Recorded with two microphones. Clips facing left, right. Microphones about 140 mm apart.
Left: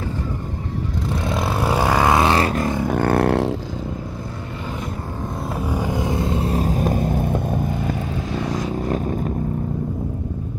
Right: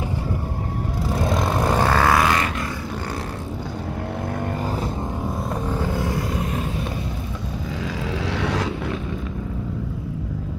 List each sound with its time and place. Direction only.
1.1 s vehicle: 5° left (ahead or behind); by 3.5 s 75° left (ahead or behind)
5.7 s vehicle: 15° left (ahead or behind); by 7.6 s 55° left (ahead or behind)
7.8 s vehicle: 90° right